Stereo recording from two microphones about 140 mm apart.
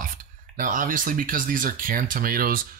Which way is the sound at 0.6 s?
70° right (ahead or behind).